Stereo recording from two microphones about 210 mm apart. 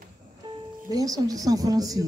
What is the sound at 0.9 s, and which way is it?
A child's voice, 15° right (ahead or behind).